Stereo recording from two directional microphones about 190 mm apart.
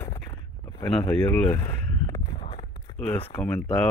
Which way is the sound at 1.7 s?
15° left (ahead or behind).